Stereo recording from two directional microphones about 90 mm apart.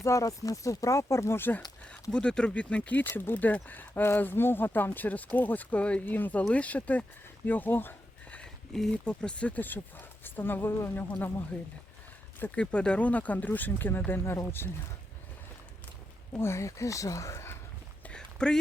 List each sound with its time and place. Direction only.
0.0 s speech: 35° left (ahead or behind)
1.8 s speech: 10° left (ahead or behind)
7.4 s a sound: 20° left (ahead or behind)
8.7 s speech: 5° left (ahead or behind); by 14.7 s 25° left (ahead or behind)
16.3 s speech: 30° left (ahead or behind)
18.1 s a sound: 10° left (ahead or behind)